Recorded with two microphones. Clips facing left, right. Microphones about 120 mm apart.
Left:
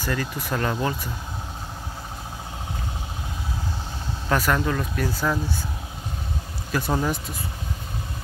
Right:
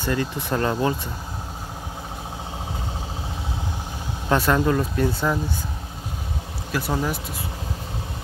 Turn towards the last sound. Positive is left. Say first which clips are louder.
# left 1 dB
turn(degrees=0)  # may be behind; listen again after turning